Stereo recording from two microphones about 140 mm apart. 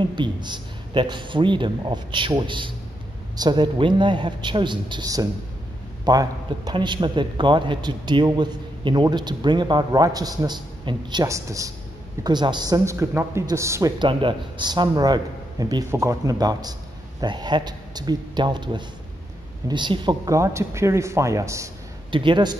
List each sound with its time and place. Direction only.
0.0 s a man's voice: 35° right (ahead or behind)
13.9 s a man's voice: 35° right (ahead or behind)
20.3 s a woman's voice: 20° right (ahead or behind)
22.1 s a man's voice: 35° right (ahead or behind)